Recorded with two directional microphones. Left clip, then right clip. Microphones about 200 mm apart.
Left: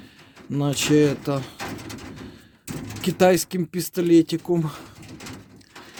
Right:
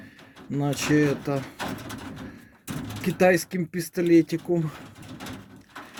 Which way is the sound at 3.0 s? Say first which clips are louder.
Left 2 dB; 25° left (ahead or behind).